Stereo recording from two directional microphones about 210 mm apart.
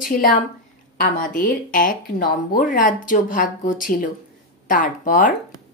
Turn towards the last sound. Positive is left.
turn(degrees=40)  # may be behind; listen again after turning